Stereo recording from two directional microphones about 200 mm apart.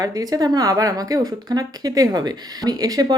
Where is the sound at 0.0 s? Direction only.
20° right (ahead or behind).